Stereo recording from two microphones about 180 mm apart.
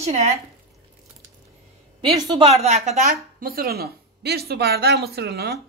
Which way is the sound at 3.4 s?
55° right (ahead or behind).